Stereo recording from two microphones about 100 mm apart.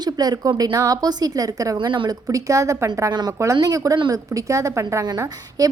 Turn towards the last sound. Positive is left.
turn(degrees=-35)  # may be behind; listen again after turning